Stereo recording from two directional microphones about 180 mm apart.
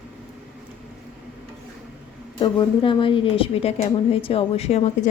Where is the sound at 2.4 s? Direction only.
25° left (ahead or behind).